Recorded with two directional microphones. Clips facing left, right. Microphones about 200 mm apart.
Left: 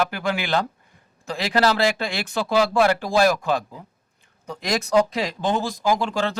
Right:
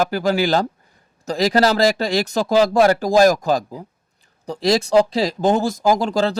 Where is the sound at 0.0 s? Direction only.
40° right (ahead or behind).